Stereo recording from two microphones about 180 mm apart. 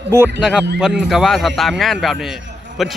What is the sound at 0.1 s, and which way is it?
A man's voice, 10° right (ahead or behind).